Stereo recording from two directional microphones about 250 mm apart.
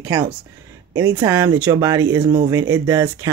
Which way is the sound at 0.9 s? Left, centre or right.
Centre.